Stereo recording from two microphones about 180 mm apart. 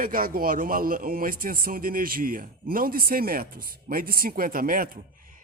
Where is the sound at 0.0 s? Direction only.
50° right (ahead or behind).